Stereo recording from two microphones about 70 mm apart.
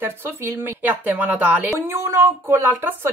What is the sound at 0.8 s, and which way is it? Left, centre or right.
A woman's voice, right.